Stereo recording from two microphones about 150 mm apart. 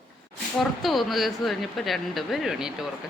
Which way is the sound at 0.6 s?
Centre (ahead or behind).